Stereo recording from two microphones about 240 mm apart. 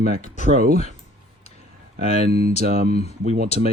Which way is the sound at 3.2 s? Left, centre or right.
Right.